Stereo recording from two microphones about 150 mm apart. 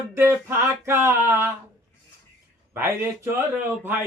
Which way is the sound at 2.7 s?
15° right (ahead or behind).